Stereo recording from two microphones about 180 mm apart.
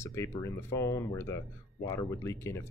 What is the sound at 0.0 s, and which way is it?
Speech, 15° left (ahead or behind).